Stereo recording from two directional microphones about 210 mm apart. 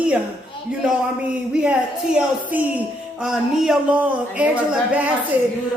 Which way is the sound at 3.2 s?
Centre (ahead or behind).